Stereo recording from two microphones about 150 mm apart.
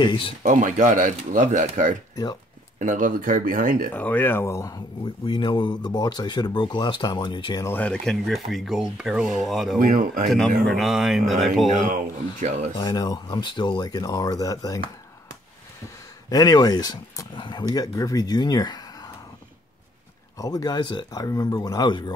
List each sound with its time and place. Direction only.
0.0 s speech: 30° left (ahead or behind)
0.4 s speech: 60° right (ahead or behind)
3.9 s speech: 10° left (ahead or behind); by 7.6 s 30° left (ahead or behind)
7.6 s speech: 10° left (ahead or behind)
9.8 s speech: 60° right (ahead or behind)
10.2 s speech: centre (ahead or behind)
11.8 s speech: 60° right (ahead or behind)
12.7 s speech: 25° left (ahead or behind)
16.3 s speech: 25° left (ahead or behind)
20.3 s speech: 25° left (ahead or behind)